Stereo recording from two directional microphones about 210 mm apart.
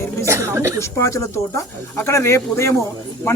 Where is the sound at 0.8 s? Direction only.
15° left (ahead or behind).